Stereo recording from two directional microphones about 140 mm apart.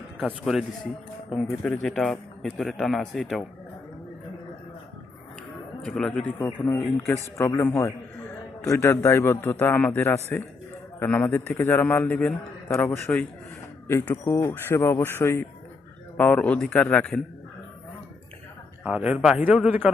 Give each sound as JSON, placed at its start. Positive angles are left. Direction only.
{"t": 0.2, "sound": "speech", "side_deg": 0}
{"t": 1.6, "sound": "speech", "side_deg": 5}
{"t": 5.8, "sound": "a man's voice", "side_deg": 5}
{"t": 18.8, "sound": "speech", "side_deg": -5}